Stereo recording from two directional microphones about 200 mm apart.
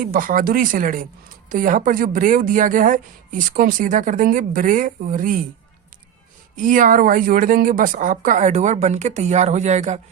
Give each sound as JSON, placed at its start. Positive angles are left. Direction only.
{"t": 0.0, "sound": "a woman's voice", "side_deg": -45}
{"t": 6.6, "sound": "a woman's voice", "side_deg": -40}